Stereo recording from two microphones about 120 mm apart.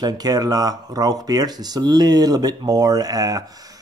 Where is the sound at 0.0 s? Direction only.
35° right (ahead or behind).